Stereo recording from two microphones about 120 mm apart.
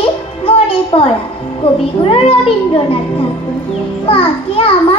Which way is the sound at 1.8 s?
50° left (ahead or behind).